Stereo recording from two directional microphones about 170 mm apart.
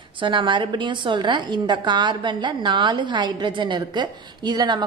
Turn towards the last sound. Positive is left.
turn(degrees=-25)  # may be behind; listen again after turning